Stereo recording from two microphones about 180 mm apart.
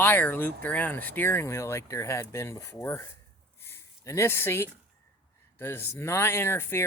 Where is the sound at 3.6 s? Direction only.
15° left (ahead or behind).